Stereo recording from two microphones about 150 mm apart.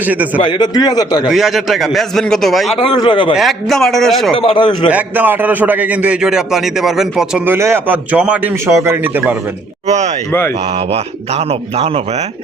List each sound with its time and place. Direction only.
0.0 s a man's voice: 10° right (ahead or behind)
0.4 s a man's voice: 30° left (ahead or behind)
1.3 s a man's voice: centre (ahead or behind)
2.7 s a man's voice: 35° left (ahead or behind)
3.3 s a man's voice: centre (ahead or behind)
4.4 s a man's voice: 35° left (ahead or behind)
4.9 s a man's voice: 10° right (ahead or behind)
9.8 s a man's voice: 50° right (ahead or behind)